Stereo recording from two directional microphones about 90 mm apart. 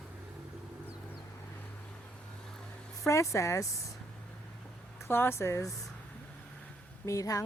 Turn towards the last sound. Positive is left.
turn(degrees=40)  # may be behind; listen again after turning